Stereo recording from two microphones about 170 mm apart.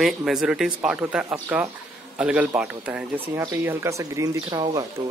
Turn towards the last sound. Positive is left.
turn(degrees=-20)  # may be behind; listen again after turning